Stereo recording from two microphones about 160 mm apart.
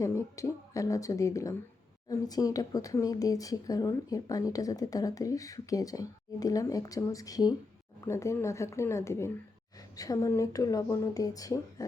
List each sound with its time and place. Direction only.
0.0 s speech: 20° left (ahead or behind)